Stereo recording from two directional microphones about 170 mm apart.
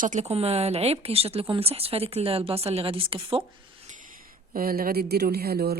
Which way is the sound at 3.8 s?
50° right (ahead or behind).